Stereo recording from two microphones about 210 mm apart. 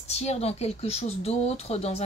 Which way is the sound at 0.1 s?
30° left (ahead or behind).